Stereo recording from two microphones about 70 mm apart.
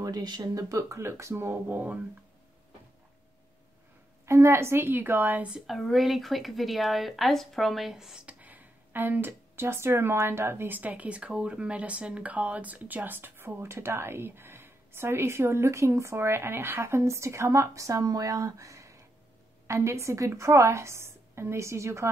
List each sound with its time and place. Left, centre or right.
0.0 s a woman's voice: right
4.3 s speech: right
5.7 s speech: centre
8.3 s a woman's voice: right